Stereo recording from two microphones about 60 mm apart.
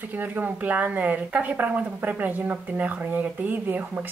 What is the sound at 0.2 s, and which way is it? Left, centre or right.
Speech, right.